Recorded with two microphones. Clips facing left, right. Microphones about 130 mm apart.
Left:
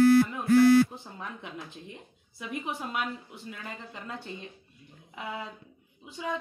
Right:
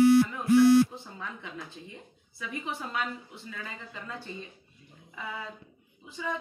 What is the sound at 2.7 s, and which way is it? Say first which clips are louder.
Speech: even; 15° left (ahead or behind).